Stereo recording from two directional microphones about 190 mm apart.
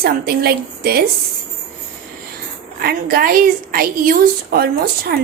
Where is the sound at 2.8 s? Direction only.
50° right (ahead or behind).